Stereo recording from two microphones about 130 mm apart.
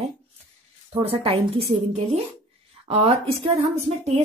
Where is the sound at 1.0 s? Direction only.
50° right (ahead or behind).